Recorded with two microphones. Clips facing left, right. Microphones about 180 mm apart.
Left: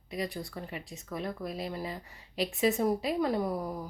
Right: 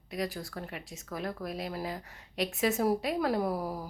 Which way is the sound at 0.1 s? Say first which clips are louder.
Even; centre (ahead or behind).